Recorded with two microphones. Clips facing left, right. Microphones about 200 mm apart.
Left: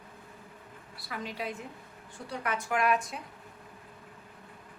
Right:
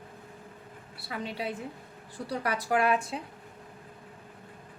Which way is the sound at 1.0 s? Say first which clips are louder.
Right 2 dB; 30° right (ahead or behind).